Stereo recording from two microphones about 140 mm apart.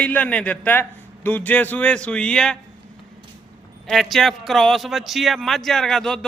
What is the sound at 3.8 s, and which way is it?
A man's voice, centre (ahead or behind).